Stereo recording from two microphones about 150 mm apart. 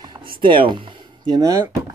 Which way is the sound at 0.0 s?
30° right (ahead or behind).